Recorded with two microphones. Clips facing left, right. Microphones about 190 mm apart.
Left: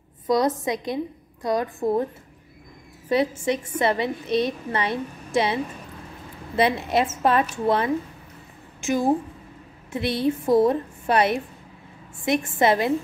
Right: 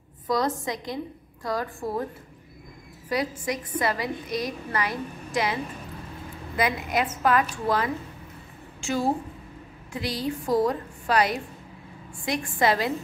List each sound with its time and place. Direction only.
0.3 s a woman's voice: 20° left (ahead or behind)
3.1 s a woman's voice: 25° left (ahead or behind)